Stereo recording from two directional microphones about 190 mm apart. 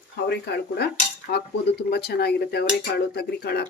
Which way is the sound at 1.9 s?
60° left (ahead or behind).